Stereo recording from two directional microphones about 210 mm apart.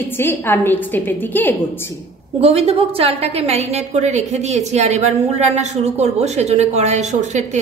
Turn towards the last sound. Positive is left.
turn(degrees=-35)  # may be behind; listen again after turning